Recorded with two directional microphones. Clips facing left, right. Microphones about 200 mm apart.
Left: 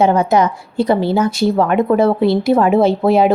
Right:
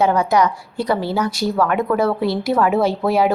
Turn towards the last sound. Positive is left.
turn(degrees=25)  # may be behind; listen again after turning